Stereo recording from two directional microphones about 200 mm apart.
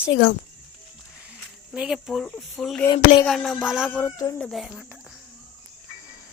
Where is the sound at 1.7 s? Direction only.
5° right (ahead or behind).